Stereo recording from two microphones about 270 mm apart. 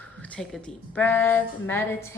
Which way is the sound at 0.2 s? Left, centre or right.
Centre.